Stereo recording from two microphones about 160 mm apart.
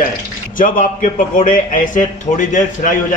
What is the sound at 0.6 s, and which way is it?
A man's voice, 60° left (ahead or behind).